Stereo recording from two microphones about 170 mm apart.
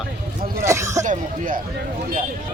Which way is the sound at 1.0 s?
50° right (ahead or behind).